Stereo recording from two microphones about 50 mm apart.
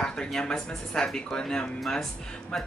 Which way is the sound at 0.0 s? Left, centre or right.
Centre.